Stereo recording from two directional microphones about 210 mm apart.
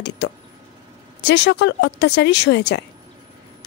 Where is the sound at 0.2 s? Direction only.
55° left (ahead or behind).